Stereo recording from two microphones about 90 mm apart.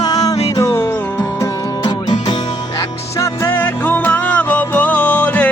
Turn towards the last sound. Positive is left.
turn(degrees=15)  # may be behind; listen again after turning